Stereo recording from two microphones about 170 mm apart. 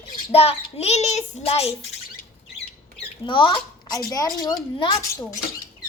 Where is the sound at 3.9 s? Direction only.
20° left (ahead or behind).